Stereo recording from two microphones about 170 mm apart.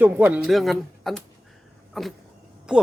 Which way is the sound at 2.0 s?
Centre (ahead or behind).